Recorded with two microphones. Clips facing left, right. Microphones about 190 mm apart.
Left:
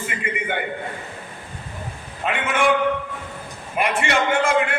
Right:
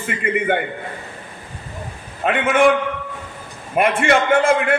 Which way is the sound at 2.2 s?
55° right (ahead or behind).